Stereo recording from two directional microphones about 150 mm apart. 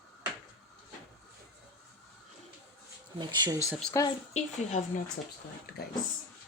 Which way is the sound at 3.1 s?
30° right (ahead or behind).